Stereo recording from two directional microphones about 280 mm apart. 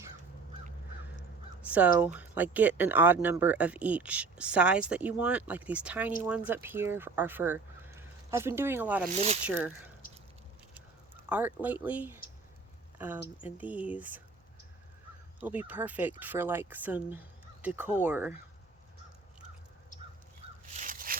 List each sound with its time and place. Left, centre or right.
1.6 s speech: centre
11.3 s speech: centre
13.4 s speech: centre
15.4 s speech: centre
20.4 s crow: right
20.7 s a sound: right